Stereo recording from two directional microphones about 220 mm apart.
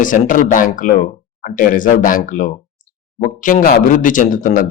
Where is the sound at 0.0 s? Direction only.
35° left (ahead or behind).